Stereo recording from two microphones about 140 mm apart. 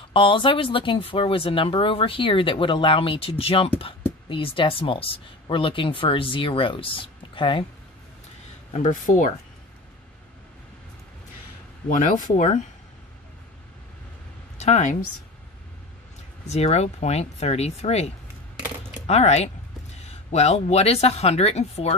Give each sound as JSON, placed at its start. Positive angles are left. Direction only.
{"t": 0.1, "sound": "speech", "side_deg": 35}
{"t": 8.7, "sound": "speech", "side_deg": 60}
{"t": 11.9, "sound": "speech", "side_deg": 65}
{"t": 14.6, "sound": "speech", "side_deg": 55}
{"t": 16.4, "sound": "speech", "side_deg": 50}